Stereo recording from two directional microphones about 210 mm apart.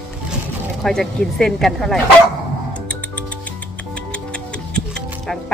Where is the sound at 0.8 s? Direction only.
Centre (ahead or behind).